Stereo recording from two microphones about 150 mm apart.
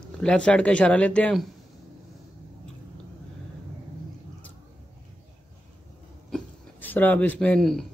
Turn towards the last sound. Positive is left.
turn(degrees=5)  # may be behind; listen again after turning